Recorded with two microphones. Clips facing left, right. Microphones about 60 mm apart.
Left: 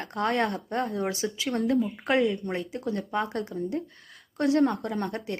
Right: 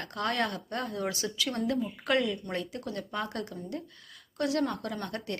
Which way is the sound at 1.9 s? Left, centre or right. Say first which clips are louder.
Left 4 dB; left.